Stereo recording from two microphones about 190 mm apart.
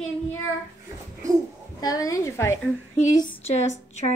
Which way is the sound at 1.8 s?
20° left (ahead or behind).